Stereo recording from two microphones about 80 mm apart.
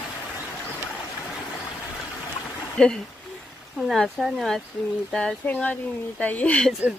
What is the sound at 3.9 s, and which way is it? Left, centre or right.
Speech, centre.